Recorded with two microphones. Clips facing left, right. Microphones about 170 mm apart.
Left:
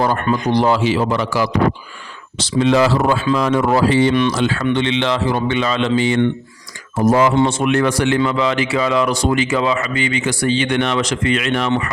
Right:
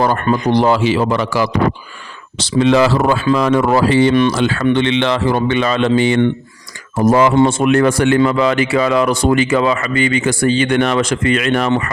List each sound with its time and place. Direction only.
0.5 s a man's voice: 65° right (ahead or behind)
7.0 s speech: 70° right (ahead or behind)
7.3 s speech: 45° right (ahead or behind)